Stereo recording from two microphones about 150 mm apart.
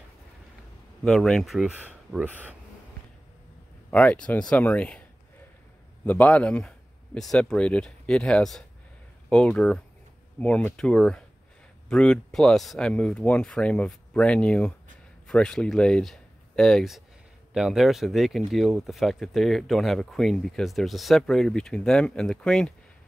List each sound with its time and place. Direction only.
1.0 s speech: 5° left (ahead or behind)
3.9 s speech: 10° left (ahead or behind)
6.0 s speech: 10° left (ahead or behind)